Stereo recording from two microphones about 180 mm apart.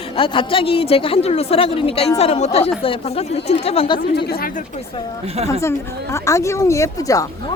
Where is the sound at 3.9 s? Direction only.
60° left (ahead or behind).